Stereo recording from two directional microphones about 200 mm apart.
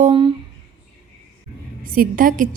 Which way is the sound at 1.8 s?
45° right (ahead or behind).